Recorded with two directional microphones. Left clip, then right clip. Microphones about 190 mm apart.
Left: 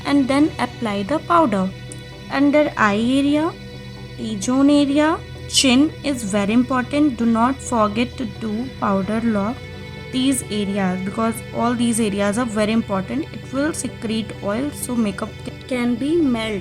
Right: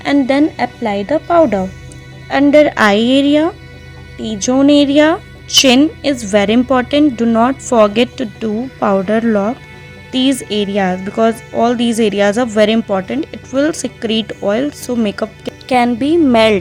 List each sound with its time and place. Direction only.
0.0 s speech: 30° right (ahead or behind)
2.3 s speech: 35° right (ahead or behind)
15.7 s speech: 55° right (ahead or behind)